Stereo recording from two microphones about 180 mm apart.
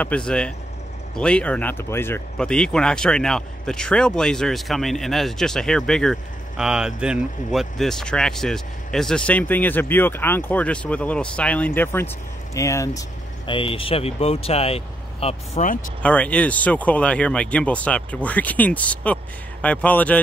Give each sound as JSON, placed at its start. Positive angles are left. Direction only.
{"t": 0.0, "sound": "speech", "side_deg": 5}
{"t": 13.5, "sound": "speech", "side_deg": 30}
{"t": 16.0, "sound": "speech", "side_deg": 5}